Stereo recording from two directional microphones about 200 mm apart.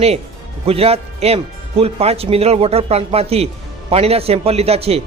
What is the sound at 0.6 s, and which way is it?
Speech, 30° right (ahead or behind).